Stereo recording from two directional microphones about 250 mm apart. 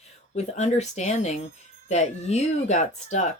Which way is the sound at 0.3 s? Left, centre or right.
Left.